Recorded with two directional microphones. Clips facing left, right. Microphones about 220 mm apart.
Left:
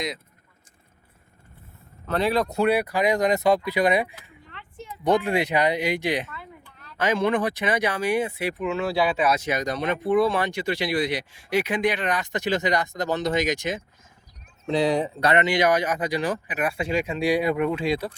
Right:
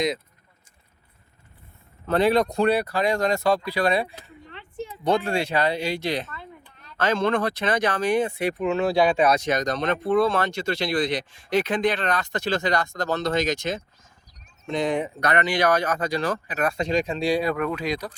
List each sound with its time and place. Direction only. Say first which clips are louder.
2.0 s speech: right 3 dB; centre (ahead or behind); by 4.1 s 15° left (ahead or behind)
4.4 s a sound: right 6 dB; 25° right (ahead or behind)
5.0 s speech: left 2 dB; 15° left (ahead or behind)
14.7 s speech: left 2 dB; 35° left (ahead or behind)